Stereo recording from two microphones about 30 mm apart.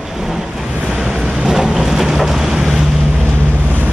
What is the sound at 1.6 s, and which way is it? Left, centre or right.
Boat, centre.